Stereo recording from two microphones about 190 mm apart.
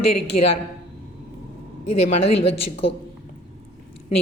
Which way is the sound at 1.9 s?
35° left (ahead or behind).